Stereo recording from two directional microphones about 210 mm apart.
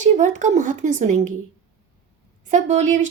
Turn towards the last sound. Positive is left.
turn(degrees=-35)  # may be behind; listen again after turning